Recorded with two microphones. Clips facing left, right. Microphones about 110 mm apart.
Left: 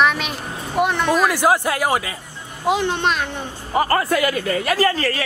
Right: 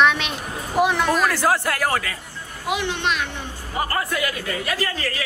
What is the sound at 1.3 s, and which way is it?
Speech, 15° left (ahead or behind).